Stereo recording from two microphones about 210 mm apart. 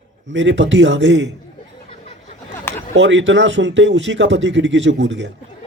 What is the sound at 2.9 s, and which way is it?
Speech, 60° right (ahead or behind).